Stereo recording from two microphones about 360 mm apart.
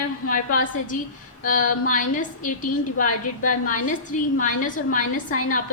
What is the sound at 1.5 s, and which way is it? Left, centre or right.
A woman's voice, left.